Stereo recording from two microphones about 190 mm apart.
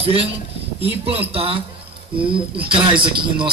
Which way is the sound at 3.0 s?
25° right (ahead or behind).